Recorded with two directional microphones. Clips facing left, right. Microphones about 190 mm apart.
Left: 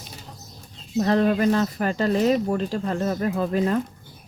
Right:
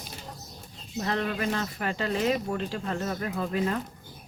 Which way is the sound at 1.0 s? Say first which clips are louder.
Left 9 dB; 40° left (ahead or behind).